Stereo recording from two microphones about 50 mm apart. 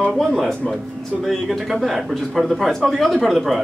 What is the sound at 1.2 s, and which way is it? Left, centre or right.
Speech, centre.